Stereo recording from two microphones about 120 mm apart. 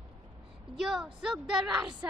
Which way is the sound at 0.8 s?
5° right (ahead or behind).